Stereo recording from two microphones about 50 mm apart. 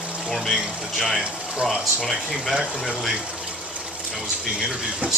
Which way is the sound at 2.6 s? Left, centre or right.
Centre.